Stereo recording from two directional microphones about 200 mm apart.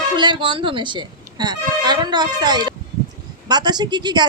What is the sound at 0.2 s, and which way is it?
A woman's voice, 25° right (ahead or behind).